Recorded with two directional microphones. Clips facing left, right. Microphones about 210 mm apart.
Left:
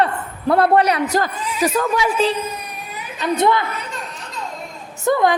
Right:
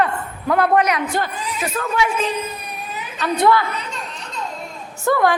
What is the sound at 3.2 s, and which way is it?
Speech, 20° left (ahead or behind).